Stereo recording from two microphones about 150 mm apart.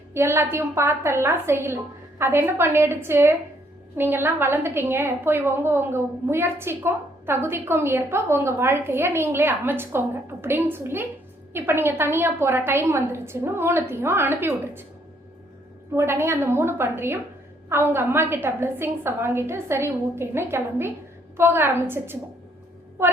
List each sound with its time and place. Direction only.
0.1 s a woman's voice: 15° right (ahead or behind)
16.0 s a woman's voice: 15° right (ahead or behind)
23.0 s a sound: 15° right (ahead or behind)